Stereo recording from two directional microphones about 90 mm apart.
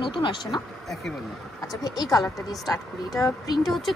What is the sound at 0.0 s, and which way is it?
Speech, 65° left (ahead or behind).